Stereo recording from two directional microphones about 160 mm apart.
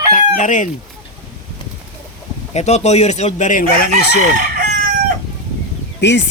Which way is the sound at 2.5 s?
45° left (ahead or behind).